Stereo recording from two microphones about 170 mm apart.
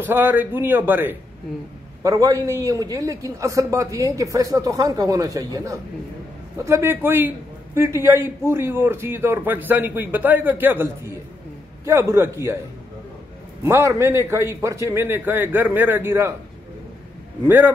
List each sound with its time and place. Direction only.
0.0 s a man's voice: 10° right (ahead or behind)
13.7 s a man's voice: 15° right (ahead or behind)